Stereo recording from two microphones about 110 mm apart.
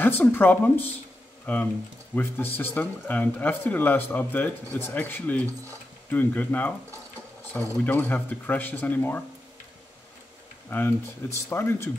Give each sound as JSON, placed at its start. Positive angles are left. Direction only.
{"t": 0.0, "sound": "speech", "side_deg": 15}
{"t": 7.7, "sound": "speech", "side_deg": 15}
{"t": 10.7, "sound": "speech", "side_deg": 20}